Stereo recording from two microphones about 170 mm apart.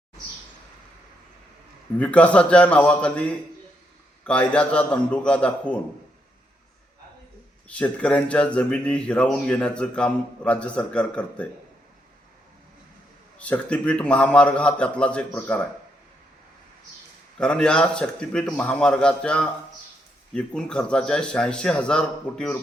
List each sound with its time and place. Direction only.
2.0 s speech: 10° left (ahead or behind)
7.7 s speech: 5° left (ahead or behind)
13.4 s speech: 10° left (ahead or behind)
17.3 s a man's voice: 5° left (ahead or behind)